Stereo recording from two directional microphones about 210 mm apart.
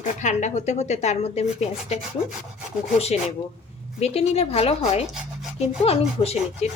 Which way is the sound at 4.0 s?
30° left (ahead or behind).